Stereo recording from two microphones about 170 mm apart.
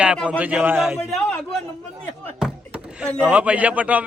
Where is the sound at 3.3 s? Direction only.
10° right (ahead or behind).